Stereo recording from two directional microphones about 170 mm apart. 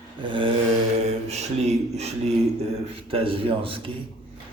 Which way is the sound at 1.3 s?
40° right (ahead or behind).